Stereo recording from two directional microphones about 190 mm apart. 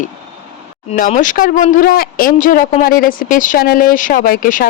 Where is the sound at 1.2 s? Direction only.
45° left (ahead or behind).